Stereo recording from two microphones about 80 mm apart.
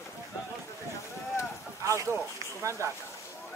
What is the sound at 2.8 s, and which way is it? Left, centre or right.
Speech, right.